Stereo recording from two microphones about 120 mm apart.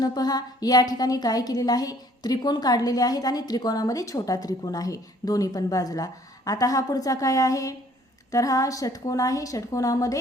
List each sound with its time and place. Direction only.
0.0 s a woman's voice: 35° left (ahead or behind)